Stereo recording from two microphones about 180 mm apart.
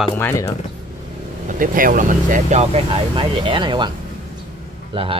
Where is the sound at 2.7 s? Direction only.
30° right (ahead or behind).